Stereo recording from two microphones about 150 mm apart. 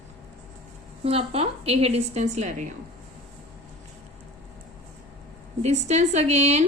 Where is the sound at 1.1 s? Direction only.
40° right (ahead or behind).